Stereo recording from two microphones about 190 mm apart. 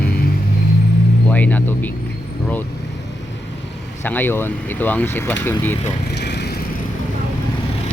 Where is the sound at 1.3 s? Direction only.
10° left (ahead or behind).